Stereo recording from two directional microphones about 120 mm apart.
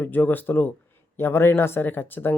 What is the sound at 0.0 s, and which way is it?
Speech, 15° left (ahead or behind).